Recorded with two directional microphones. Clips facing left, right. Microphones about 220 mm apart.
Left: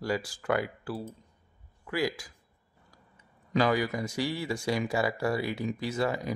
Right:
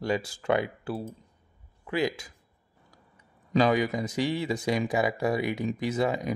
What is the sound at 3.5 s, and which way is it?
A man's voice, 20° right (ahead or behind).